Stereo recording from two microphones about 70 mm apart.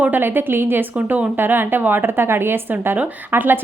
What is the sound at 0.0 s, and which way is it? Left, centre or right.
A woman's voice, right.